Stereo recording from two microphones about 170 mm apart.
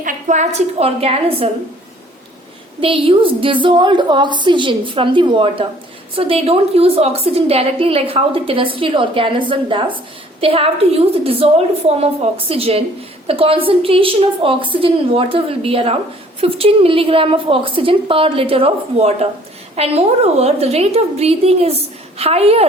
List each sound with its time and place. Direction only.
0.0 s a woman's voice: 50° right (ahead or behind)
2.8 s a woman's voice: 30° right (ahead or behind)